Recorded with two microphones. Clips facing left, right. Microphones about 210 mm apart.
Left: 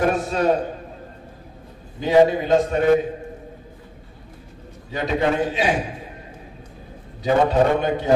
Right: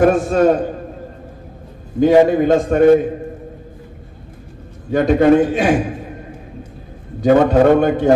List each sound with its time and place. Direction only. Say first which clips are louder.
0.0 s a man's voice: right 7 dB; 50° right (ahead or behind)
2.0 s a man's voice: right 5 dB; 50° right (ahead or behind)
4.8 s a man's voice: right 10 dB; 50° right (ahead or behind)
7.2 s a man's voice: right 6 dB; 50° right (ahead or behind)